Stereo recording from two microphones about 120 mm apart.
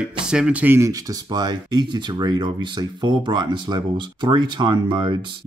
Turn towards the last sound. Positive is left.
turn(degrees=-40)  # may be behind; listen again after turning